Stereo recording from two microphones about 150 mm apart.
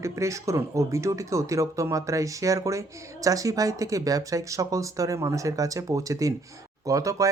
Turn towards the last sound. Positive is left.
turn(degrees=-20)  # may be behind; listen again after turning